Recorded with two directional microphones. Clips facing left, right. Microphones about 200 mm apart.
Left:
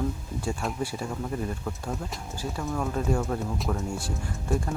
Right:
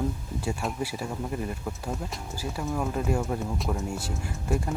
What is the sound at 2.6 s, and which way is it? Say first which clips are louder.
Speech: even; 15° right (ahead or behind).